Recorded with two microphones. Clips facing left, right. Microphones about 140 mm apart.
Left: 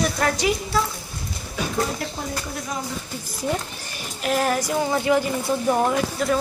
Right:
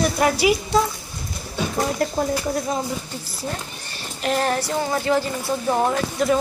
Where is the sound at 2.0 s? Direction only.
45° right (ahead or behind).